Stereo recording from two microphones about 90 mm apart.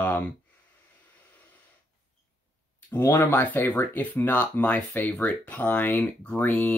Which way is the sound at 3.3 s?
20° left (ahead or behind).